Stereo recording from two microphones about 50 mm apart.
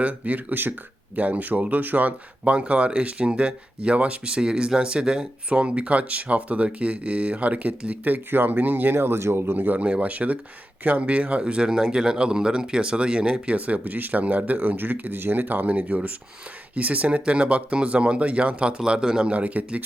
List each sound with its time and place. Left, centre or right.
0.0 s speech: right
8.0 s speech: right
9.0 s speech: right
9.6 s speech: right
19.3 s speech: right